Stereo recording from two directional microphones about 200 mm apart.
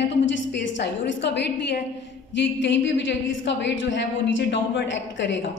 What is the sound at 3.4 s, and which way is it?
Speech, 65° left (ahead or behind).